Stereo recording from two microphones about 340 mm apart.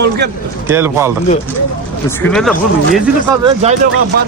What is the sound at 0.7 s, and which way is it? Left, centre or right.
Speech, centre.